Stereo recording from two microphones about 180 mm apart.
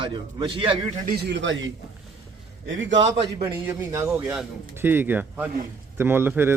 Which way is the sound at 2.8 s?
90° right.